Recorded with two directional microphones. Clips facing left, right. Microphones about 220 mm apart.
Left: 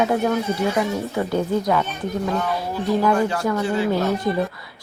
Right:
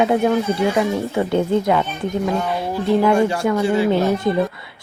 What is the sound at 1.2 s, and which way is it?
Speech, 25° right (ahead or behind).